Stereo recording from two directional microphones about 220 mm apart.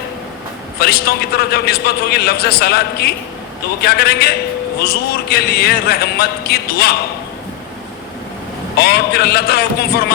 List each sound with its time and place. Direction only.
0.8 s a man's voice: 45° left (ahead or behind)
8.8 s a man's voice: 45° left (ahead or behind)